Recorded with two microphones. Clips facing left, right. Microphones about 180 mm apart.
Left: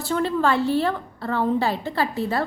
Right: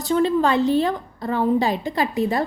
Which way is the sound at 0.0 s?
20° right (ahead or behind).